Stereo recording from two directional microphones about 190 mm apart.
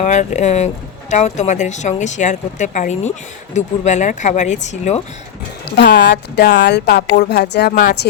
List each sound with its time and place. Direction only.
0.0 s a woman's voice: 40° left (ahead or behind)
5.8 s a woman's voice: 65° left (ahead or behind)